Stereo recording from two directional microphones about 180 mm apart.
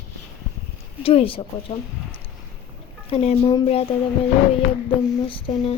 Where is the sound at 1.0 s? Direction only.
30° left (ahead or behind).